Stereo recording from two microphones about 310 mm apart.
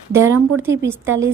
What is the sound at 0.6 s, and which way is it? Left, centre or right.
Speech, centre.